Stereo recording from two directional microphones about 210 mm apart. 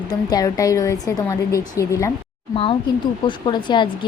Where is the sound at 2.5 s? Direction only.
25° left (ahead or behind).